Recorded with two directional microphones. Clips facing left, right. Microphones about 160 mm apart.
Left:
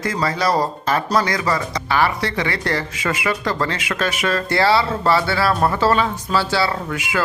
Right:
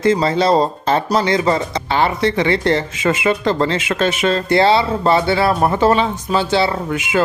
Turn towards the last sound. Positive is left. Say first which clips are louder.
# right 5 dB
turn(degrees=-20)  # may be behind; listen again after turning